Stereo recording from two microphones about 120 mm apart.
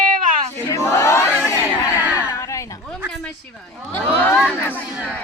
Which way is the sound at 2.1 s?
25° left (ahead or behind).